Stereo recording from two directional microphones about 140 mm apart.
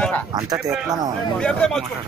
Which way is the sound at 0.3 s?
30° right (ahead or behind).